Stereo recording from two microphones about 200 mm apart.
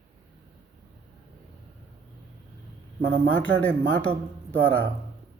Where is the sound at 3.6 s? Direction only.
10° left (ahead or behind).